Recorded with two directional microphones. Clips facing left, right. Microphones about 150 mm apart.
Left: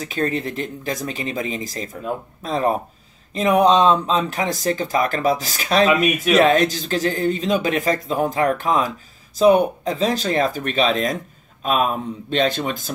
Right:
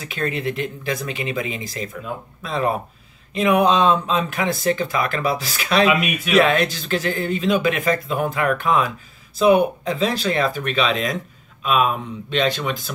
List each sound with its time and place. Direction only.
0.0 s speech: 40° left (ahead or behind)